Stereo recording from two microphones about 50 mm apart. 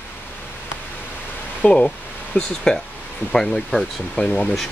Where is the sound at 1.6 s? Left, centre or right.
Left.